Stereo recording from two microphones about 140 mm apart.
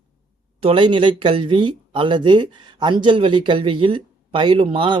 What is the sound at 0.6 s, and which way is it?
Speech, 35° right (ahead or behind).